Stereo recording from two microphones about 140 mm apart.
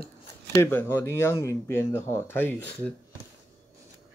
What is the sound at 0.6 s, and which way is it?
Speech, 15° left (ahead or behind).